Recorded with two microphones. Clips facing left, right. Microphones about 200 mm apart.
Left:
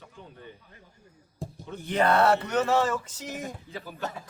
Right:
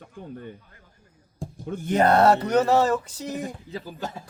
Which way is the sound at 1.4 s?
Centre (ahead or behind).